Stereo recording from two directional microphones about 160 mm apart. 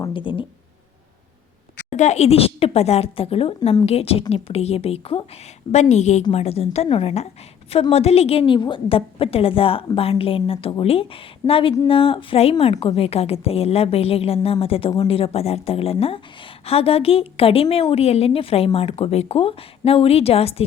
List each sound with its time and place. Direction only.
0.1 s a woman's voice: 30° left (ahead or behind)
1.9 s a woman's voice: 45° left (ahead or behind)